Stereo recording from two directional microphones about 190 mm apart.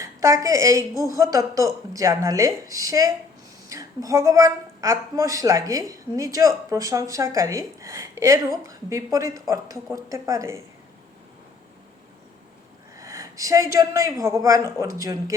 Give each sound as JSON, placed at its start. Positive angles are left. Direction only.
{"t": 0.0, "sound": "a woman's voice", "side_deg": -15}
{"t": 13.0, "sound": "a sound", "side_deg": -15}
{"t": 13.7, "sound": "a woman's voice", "side_deg": -15}